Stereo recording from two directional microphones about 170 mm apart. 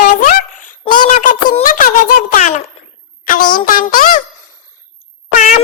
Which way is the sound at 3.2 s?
55° left (ahead or behind).